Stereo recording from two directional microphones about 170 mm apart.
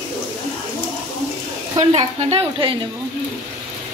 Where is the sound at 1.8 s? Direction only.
35° right (ahead or behind).